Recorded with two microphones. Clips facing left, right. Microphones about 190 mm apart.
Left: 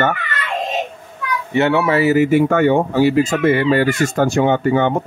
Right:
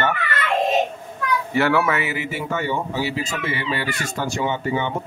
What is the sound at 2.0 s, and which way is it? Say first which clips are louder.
Speech: left 14 dB; 45° left (ahead or behind).